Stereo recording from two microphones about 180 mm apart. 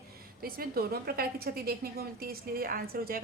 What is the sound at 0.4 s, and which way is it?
A woman's voice, 55° right (ahead or behind).